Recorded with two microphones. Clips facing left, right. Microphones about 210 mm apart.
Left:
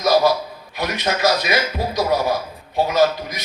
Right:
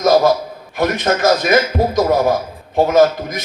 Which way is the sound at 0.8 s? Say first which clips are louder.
Right 5 dB; 50° right (ahead or behind).